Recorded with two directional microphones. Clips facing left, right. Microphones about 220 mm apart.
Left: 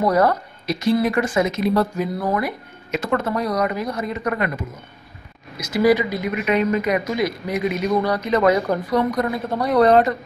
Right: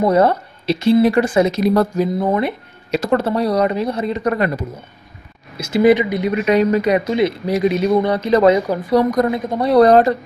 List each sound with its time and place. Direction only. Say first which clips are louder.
0.0 s speech: right 4 dB; 25° right (ahead or behind); by 2.0 s 40° right (ahead or behind)
2.1 s speech: right 5 dB; 25° right (ahead or behind)